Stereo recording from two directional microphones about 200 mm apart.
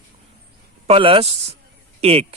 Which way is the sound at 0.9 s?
25° right (ahead or behind).